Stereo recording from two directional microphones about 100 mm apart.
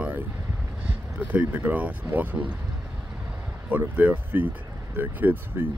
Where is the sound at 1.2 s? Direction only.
15° right (ahead or behind).